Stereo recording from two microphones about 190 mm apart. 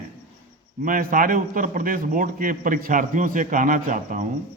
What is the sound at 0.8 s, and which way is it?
A man's voice, 45° right (ahead or behind).